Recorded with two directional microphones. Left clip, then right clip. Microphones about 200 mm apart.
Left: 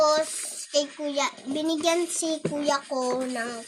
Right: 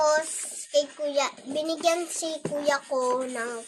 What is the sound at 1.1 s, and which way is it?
Speech, 50° right (ahead or behind).